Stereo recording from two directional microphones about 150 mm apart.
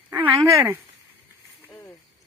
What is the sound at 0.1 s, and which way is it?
Speech, 15° right (ahead or behind).